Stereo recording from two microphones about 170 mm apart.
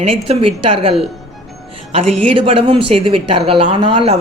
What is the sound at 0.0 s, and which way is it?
Speech, 35° right (ahead or behind).